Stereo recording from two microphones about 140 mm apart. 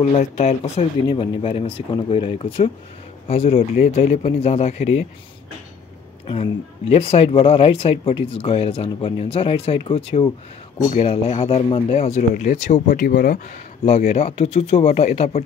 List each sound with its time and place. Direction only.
0.2 s speech: 50° left (ahead or behind)
1.0 s speech: 40° left (ahead or behind)
6.2 s speech: 40° left (ahead or behind); by 13.4 s 90° left
13.8 s speech: 55° left (ahead or behind)